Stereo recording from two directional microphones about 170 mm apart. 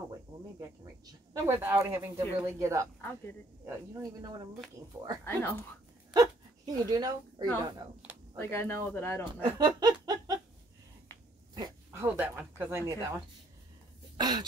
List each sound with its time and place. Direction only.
0.6 s speech: 20° right (ahead or behind)
5.2 s speech: 10° left (ahead or behind)
6.1 s speech: 20° right (ahead or behind)
8.4 s speech: 15° left (ahead or behind)
9.2 s speech: 25° right (ahead or behind)
11.5 s speech: 20° right (ahead or behind)
14.1 s speech: 25° right (ahead or behind)